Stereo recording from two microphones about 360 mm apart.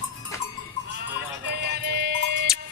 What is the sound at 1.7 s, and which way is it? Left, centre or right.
Music, right.